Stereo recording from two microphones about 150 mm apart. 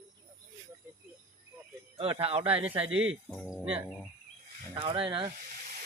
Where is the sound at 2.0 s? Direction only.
40° right (ahead or behind).